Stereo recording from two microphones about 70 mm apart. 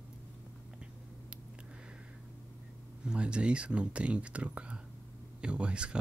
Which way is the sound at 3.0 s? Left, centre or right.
Centre.